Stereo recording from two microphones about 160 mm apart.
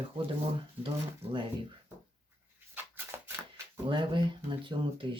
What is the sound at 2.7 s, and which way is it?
Shuffling cards, 15° right (ahead or behind).